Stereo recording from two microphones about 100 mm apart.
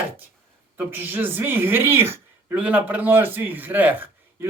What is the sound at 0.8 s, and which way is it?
A man's voice, 20° right (ahead or behind).